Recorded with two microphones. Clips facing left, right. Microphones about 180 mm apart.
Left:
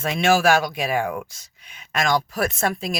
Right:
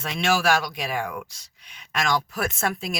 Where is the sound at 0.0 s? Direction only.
50° left (ahead or behind).